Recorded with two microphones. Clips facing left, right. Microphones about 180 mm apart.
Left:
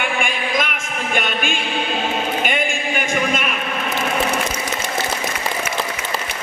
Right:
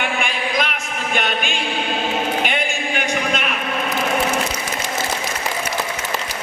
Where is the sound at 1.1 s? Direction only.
50° left (ahead or behind).